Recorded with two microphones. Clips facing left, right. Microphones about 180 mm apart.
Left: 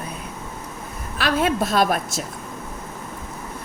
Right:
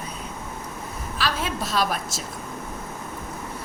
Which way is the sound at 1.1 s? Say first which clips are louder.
Left 7 dB; 55° left (ahead or behind).